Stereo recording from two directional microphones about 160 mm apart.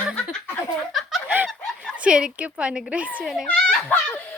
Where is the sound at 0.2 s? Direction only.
10° left (ahead or behind).